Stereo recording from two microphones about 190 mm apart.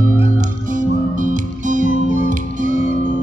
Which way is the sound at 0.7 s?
40° right (ahead or behind).